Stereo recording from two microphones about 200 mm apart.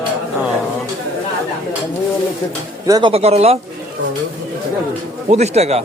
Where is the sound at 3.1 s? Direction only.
30° right (ahead or behind).